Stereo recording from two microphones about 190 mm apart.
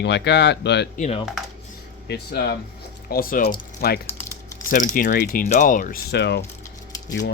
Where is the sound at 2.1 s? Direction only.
60° left (ahead or behind).